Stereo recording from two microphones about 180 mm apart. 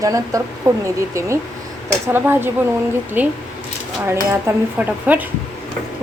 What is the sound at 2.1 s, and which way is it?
Speech, 10° right (ahead or behind).